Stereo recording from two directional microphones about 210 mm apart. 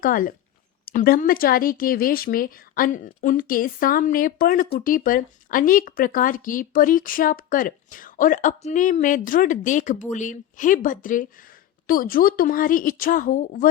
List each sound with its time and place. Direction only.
0.0 s speech: 40° left (ahead or behind)